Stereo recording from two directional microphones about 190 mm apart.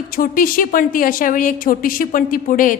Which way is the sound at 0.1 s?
50° left (ahead or behind).